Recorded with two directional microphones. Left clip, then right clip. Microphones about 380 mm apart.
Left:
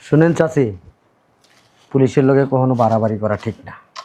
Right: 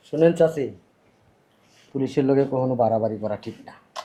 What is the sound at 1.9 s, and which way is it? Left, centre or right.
Speech, left.